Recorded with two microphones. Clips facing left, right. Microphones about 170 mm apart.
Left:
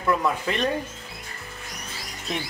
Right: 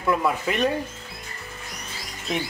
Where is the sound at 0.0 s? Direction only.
10° right (ahead or behind).